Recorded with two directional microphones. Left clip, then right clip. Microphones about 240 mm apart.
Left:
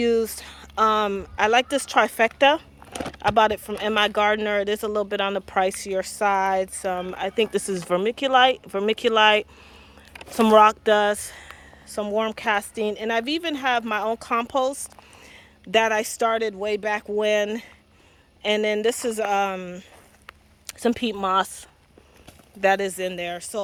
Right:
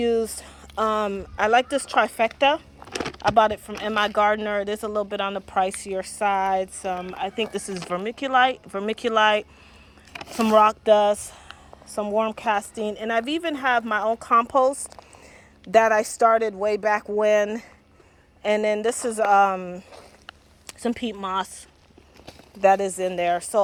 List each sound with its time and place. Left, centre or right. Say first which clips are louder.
0.0 s speech: left 1 dB; centre
15.6 s speech: right 3 dB; centre
16.6 s speech: right 3 dB; centre
17.2 s speech: even; centre
19.3 s speech: right 5 dB; centre
20.8 s speech: left 4 dB; centre
23.0 s speech: right 5 dB; centre